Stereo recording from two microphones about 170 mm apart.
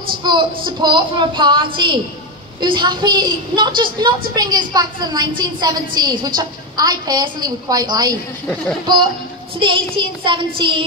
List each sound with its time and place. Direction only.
0.2 s a woman's voice: 30° right (ahead or behind)
9.6 s a woman's voice: 30° right (ahead or behind)